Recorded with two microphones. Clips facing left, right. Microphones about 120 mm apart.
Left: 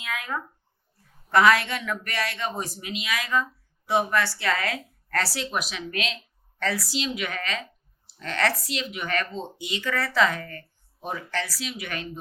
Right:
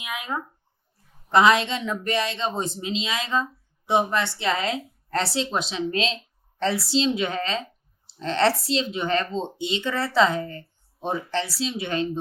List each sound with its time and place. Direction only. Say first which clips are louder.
0.0 s speech: right 1 dB; 20° right (ahead or behind)